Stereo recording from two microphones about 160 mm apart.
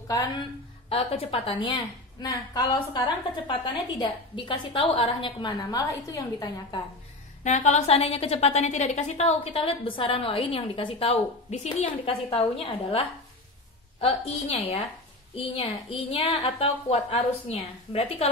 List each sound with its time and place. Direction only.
0.8 s a woman's voice: 35° left (ahead or behind)
7.4 s a woman's voice: 45° left (ahead or behind)
12.3 s a woman's voice: 35° left (ahead or behind)